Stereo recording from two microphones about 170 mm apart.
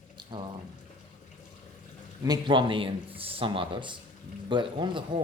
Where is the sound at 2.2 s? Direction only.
25° right (ahead or behind).